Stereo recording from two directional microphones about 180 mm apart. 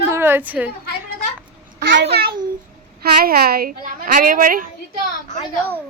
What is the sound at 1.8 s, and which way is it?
A child's voice, 75° right (ahead or behind).